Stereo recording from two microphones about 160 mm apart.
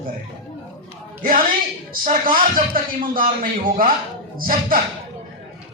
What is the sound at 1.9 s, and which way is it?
Speech, 65° right (ahead or behind).